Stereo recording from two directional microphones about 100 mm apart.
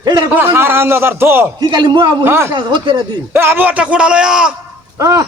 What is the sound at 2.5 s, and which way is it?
Speech, 50° right (ahead or behind).